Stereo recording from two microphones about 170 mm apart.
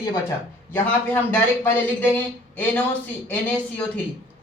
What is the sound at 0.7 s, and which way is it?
Speech, 10° left (ahead or behind).